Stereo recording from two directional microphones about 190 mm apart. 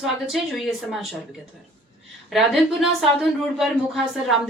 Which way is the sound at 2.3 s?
Centre (ahead or behind).